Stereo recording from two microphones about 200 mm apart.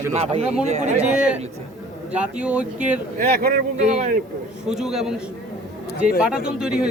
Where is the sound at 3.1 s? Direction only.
50° right (ahead or behind).